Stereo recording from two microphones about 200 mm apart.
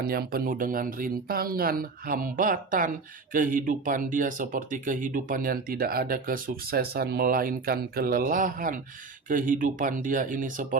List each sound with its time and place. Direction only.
0.0 s speech: 50° right (ahead or behind)